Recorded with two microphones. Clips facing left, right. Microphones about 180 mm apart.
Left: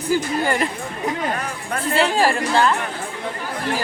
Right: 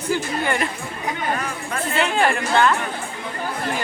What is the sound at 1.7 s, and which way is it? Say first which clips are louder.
Speech: left 3 dB; 35° left (ahead or behind).